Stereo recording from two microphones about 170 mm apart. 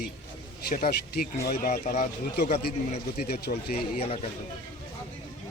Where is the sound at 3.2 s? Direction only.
65° left (ahead or behind).